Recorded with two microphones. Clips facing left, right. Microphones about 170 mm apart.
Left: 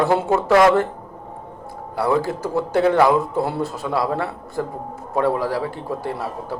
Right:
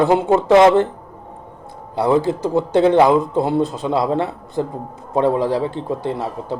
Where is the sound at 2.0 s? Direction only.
20° right (ahead or behind).